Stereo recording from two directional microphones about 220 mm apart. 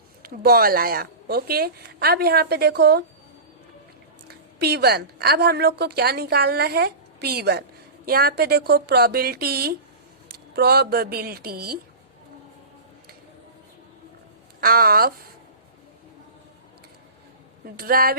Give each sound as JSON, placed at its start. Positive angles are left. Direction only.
{"t": 0.2, "sound": "a woman's voice", "side_deg": -45}
{"t": 4.6, "sound": "a woman's voice", "side_deg": -45}
{"t": 14.6, "sound": "a woman's voice", "side_deg": -45}
{"t": 17.7, "sound": "a woman's voice", "side_deg": -40}